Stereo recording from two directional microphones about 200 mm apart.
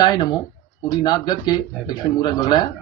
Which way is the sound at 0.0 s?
20° left (ahead or behind).